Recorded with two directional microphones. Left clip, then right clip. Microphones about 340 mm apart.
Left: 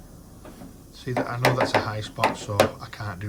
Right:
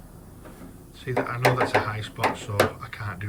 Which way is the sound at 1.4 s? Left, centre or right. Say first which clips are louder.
Even; left.